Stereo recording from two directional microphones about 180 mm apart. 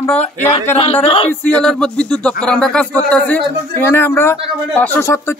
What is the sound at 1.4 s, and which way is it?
Speech, 5° left (ahead or behind).